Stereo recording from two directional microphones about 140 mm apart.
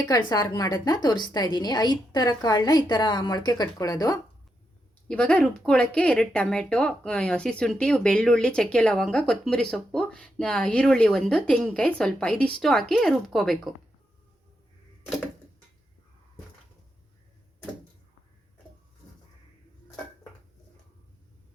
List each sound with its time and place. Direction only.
0.0 s a woman's voice: 25° left (ahead or behind)
5.0 s speech: 10° left (ahead or behind)